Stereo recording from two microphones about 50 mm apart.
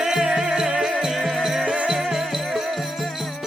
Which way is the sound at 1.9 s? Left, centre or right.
Centre.